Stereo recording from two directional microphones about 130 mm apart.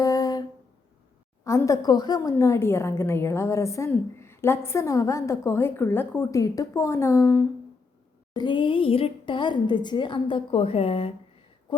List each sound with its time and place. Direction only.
0.0 s a sound: 25° left (ahead or behind)
1.5 s a woman's voice: 20° left (ahead or behind)
8.3 s a woman's voice: 35° left (ahead or behind)